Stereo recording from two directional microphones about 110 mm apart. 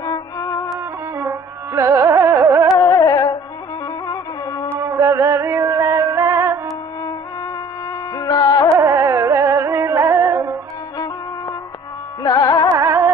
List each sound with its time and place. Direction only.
0.0 s music: 35° left (ahead or behind)
1.1 s carnatic music: 25° right (ahead or behind)
2.8 s music: 35° left (ahead or behind)
4.7 s music: 25° right (ahead or behind)
8.2 s music: 35° left (ahead or behind)
8.7 s music: 25° right (ahead or behind)
12.2 s carnatic music: 35° left (ahead or behind)
12.7 s carnatic music: 25° right (ahead or behind)